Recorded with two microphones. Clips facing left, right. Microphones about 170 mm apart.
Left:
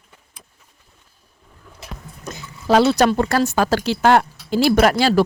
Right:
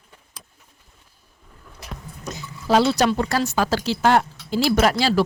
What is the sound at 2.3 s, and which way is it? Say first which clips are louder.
Speech: left 3 dB; 55° left (ahead or behind).